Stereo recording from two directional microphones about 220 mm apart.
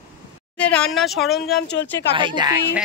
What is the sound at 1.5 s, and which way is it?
Speech, 50° left (ahead or behind).